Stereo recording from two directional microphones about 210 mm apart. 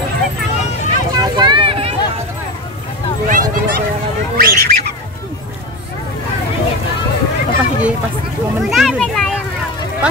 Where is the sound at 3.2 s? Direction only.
40° right (ahead or behind).